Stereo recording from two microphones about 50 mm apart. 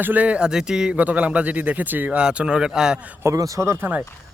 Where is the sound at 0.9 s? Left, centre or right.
Right.